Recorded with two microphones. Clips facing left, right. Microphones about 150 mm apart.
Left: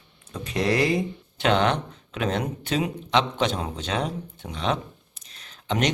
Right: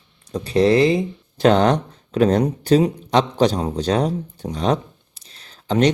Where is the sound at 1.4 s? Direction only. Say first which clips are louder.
Right 7 dB; 40° right (ahead or behind).